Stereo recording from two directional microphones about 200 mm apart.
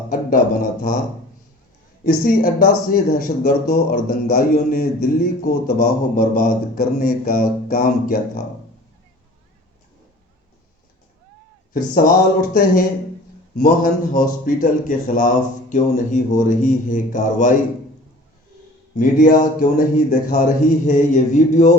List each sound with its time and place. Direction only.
0.1 s speech: 45° left (ahead or behind)
2.0 s speech: 45° left (ahead or behind)
11.7 s a man's voice: 45° left (ahead or behind)
19.2 s a man's voice: 40° left (ahead or behind)